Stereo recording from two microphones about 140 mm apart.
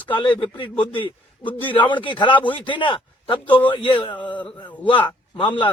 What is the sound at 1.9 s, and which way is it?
A man's voice, 35° left (ahead or behind).